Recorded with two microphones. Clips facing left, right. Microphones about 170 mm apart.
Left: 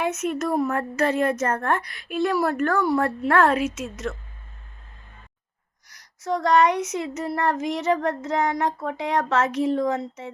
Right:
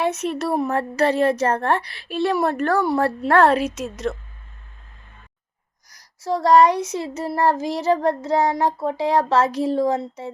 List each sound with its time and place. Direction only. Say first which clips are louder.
0.0 s child singing: right 2 dB; 35° right (ahead or behind)
5.9 s child singing: right 2 dB; 30° right (ahead or behind)